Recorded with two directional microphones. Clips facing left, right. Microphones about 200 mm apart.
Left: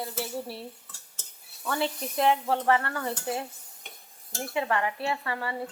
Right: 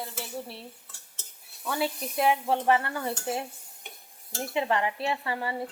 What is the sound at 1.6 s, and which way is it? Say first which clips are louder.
Speech: even; 10° right (ahead or behind).